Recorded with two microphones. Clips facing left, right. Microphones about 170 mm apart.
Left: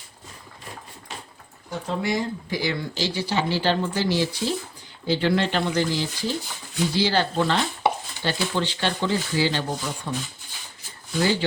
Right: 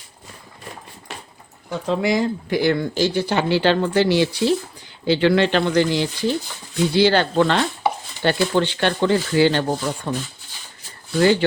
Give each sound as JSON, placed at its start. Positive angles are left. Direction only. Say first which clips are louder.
{"t": 1.9, "sound": "speech", "louder": "right 6 dB", "side_deg": -90}
{"t": 11.2, "sound": "speech", "louder": "right 7 dB", "side_deg": -60}